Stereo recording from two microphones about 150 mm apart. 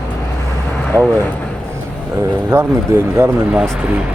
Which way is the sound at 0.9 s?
20° right (ahead or behind).